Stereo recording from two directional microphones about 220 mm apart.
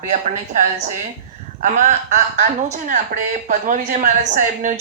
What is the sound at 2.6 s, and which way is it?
Speech, 35° right (ahead or behind).